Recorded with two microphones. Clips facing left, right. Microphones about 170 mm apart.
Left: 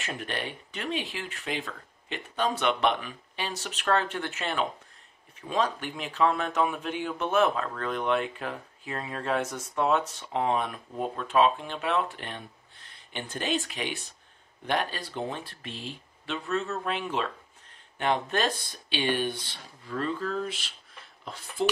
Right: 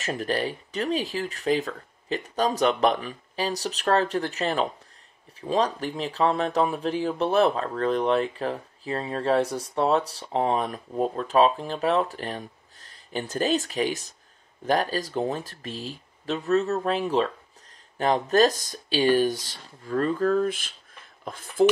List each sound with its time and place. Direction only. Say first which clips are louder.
0.0 s speech: right 7 dB; 35° right (ahead or behind)